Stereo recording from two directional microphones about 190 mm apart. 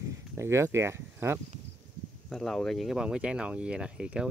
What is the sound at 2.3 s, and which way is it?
Speech, centre (ahead or behind).